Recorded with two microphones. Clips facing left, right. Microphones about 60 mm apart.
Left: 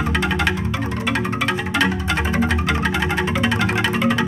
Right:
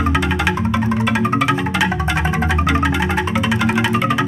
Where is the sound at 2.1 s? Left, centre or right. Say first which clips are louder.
Right 1 dB; centre.